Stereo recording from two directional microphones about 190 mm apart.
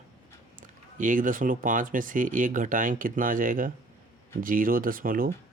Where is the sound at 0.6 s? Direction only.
45° right (ahead or behind).